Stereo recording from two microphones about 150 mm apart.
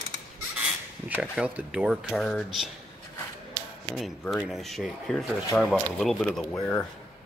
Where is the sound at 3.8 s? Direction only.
Centre (ahead or behind).